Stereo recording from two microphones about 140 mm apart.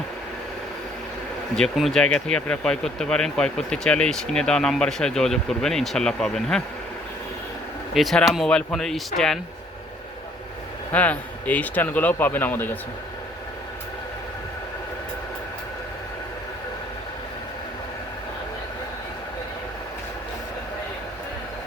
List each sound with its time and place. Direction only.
1.5 s speech: centre (ahead or behind)
7.9 s speech: centre (ahead or behind)
10.9 s speech: 10° left (ahead or behind)